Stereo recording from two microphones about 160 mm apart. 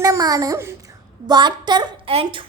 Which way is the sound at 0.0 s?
25° right (ahead or behind).